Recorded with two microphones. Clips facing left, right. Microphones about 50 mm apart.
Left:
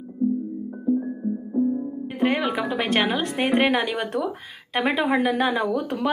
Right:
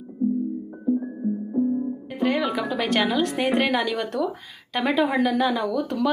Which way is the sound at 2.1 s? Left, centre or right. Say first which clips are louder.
Left 1 dB; left.